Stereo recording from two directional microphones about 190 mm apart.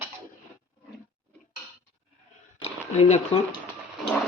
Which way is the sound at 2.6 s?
35° left (ahead or behind).